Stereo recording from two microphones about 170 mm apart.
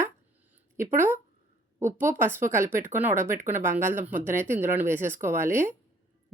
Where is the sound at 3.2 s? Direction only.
50° right (ahead or behind).